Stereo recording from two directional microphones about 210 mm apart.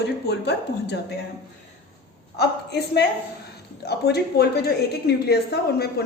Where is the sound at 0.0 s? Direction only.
55° left (ahead or behind).